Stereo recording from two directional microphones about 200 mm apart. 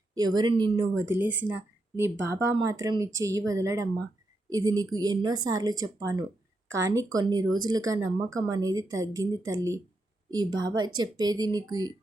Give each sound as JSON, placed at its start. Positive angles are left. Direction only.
{"t": 0.1, "sound": "speech", "side_deg": -20}
{"t": 7.4, "sound": "speech", "side_deg": -90}
{"t": 7.7, "sound": "speech", "side_deg": -20}